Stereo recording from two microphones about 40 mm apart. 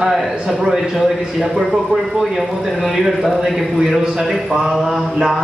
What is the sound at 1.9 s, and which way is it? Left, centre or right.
Speech, right.